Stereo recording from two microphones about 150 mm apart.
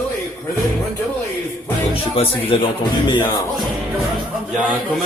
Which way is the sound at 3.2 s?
20° left (ahead or behind).